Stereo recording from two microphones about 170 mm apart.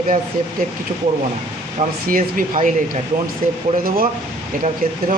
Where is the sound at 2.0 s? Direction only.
55° right (ahead or behind).